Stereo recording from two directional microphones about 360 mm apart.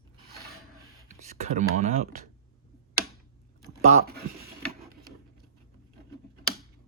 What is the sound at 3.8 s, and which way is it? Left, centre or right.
Speech, centre.